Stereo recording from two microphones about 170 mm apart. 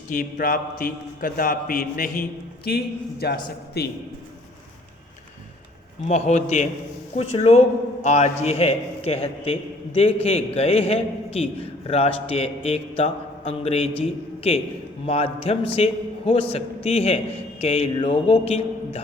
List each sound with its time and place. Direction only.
0.1 s a man's voice: 50° left (ahead or behind); by 3.9 s 70° left (ahead or behind)
6.1 s a man's voice: 40° left (ahead or behind)